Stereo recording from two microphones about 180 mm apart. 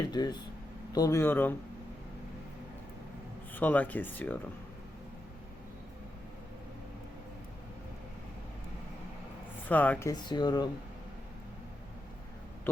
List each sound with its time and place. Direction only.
0.1 s speech: 25° left (ahead or behind)
3.5 s speech: 10° left (ahead or behind)
9.6 s speech: 10° left (ahead or behind)